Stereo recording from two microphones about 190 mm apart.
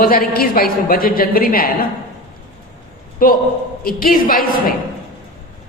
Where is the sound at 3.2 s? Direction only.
50° left (ahead or behind).